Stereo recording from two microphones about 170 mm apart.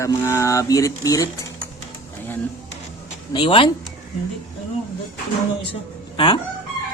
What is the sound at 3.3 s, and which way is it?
Speech, 30° left (ahead or behind).